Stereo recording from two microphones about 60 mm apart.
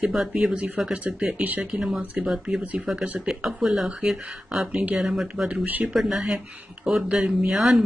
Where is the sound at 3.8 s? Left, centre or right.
Centre.